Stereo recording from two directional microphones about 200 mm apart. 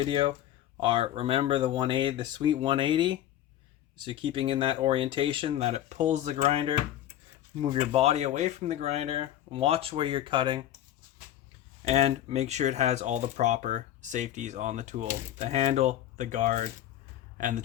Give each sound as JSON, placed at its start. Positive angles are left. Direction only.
{"t": 0.1, "sound": "speech", "side_deg": -25}
{"t": 7.8, "sound": "speech", "side_deg": -35}
{"t": 11.9, "sound": "speech", "side_deg": -35}